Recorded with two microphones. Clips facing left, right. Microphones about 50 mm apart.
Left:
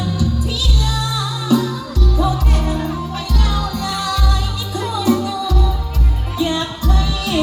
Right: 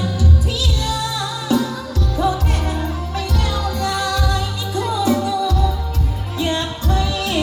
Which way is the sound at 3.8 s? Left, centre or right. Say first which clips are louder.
Right 1 dB; right.